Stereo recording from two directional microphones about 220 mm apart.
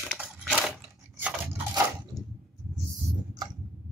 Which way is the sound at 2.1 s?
15° left (ahead or behind).